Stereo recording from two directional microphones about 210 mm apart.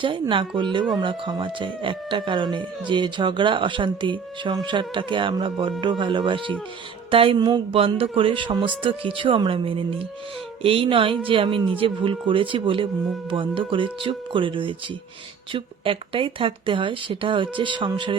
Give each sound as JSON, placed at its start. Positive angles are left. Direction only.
{"t": 0.0, "sound": "speech", "side_deg": -25}